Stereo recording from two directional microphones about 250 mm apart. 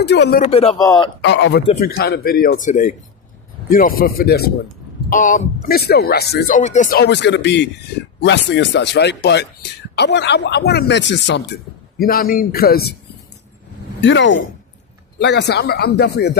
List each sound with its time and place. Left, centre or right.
0.0 s speech: left
0.5 s a man's voice: left
1.2 s speech: left
1.6 s a man's voice: left
2.0 s speech: left
6.6 s speech: left
14.0 s speech: left